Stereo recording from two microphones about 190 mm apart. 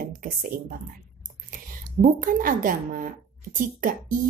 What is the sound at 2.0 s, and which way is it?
A woman's voice, 45° right (ahead or behind).